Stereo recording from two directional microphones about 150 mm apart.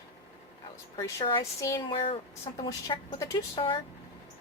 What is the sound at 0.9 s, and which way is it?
A woman's voice, 25° left (ahead or behind).